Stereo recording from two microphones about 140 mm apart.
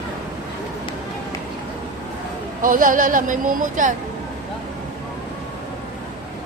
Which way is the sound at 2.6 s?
80° right.